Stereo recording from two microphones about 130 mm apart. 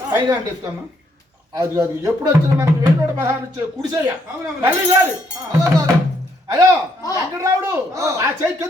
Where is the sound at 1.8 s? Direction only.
20° right (ahead or behind).